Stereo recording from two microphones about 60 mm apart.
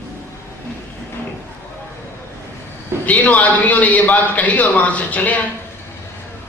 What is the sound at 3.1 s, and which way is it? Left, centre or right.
A man's voice, left.